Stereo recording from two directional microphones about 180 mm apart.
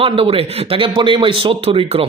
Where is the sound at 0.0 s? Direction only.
30° right (ahead or behind).